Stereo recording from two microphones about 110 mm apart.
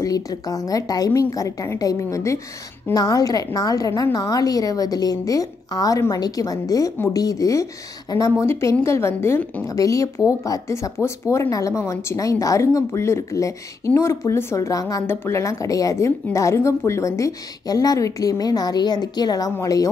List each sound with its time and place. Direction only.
0.0 s a woman's voice: 35° left (ahead or behind)